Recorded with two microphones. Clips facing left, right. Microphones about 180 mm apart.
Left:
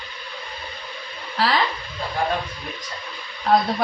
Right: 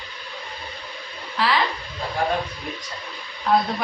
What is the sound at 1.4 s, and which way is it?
Speech, 35° left (ahead or behind).